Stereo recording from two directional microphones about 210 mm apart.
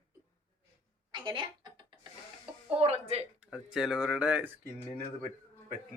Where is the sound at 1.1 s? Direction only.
20° right (ahead or behind).